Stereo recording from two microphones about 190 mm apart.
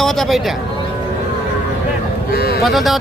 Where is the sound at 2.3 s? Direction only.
50° left (ahead or behind).